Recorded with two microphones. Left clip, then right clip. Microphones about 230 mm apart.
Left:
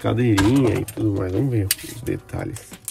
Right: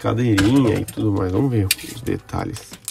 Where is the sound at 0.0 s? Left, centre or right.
Centre.